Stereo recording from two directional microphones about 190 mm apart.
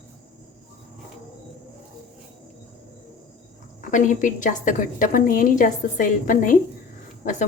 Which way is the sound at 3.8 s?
40° left (ahead or behind).